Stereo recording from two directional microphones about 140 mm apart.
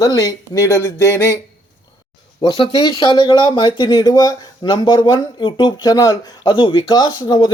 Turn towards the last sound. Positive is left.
turn(degrees=30)  # may be behind; listen again after turning